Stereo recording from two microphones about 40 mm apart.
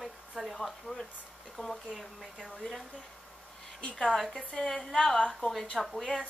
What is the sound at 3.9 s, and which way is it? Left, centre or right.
Speech, centre.